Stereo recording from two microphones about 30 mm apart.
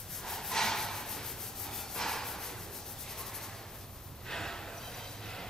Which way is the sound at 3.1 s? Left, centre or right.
Centre.